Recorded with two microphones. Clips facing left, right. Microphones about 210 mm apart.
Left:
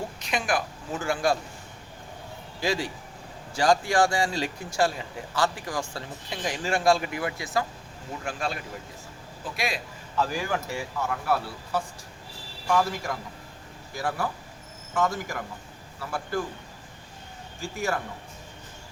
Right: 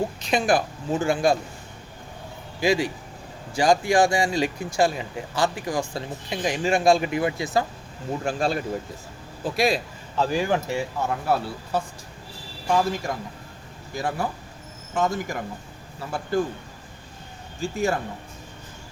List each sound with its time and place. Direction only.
0.2 s speech: 30° right (ahead or behind)
2.6 s a man's voice: 15° right (ahead or behind)
8.2 s speech: 35° right (ahead or behind)
17.6 s speech: 20° right (ahead or behind)